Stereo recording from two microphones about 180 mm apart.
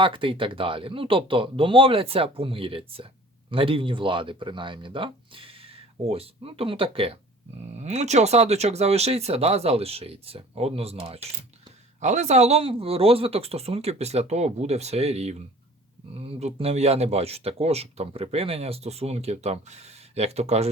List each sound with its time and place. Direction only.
0.0 s speech: 30° right (ahead or behind)